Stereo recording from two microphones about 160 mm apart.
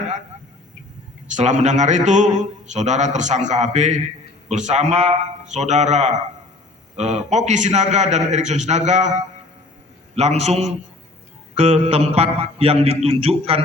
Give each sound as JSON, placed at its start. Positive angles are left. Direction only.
{"t": 1.3, "sound": "a man's voice", "side_deg": -50}